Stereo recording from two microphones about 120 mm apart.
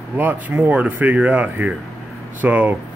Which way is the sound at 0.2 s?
15° right (ahead or behind).